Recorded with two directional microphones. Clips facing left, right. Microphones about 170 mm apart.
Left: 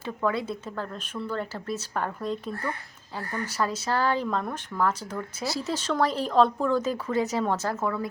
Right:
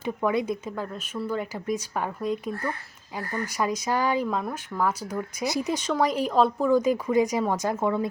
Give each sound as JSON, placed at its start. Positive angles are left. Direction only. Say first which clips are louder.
{"t": 0.0, "sound": "speech", "louder": "right 3 dB", "side_deg": -15}